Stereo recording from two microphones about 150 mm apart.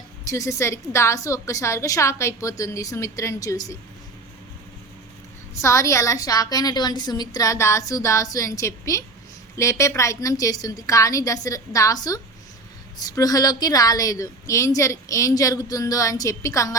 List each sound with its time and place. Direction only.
0.3 s a woman's voice: 20° left (ahead or behind)
5.6 s a woman's voice: 20° left (ahead or behind)